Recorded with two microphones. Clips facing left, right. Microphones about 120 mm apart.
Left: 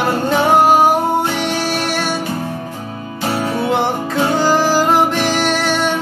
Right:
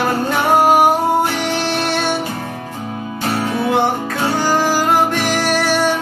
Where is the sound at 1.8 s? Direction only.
20° right (ahead or behind).